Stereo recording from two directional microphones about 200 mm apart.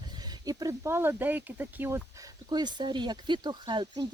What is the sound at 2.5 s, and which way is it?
Speech, 20° right (ahead or behind).